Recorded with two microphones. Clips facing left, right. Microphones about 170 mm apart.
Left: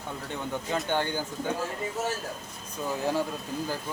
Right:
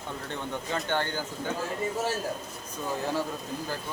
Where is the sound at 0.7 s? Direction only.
10° left (ahead or behind).